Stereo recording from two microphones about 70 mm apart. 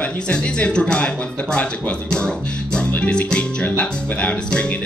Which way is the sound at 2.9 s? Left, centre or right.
Centre.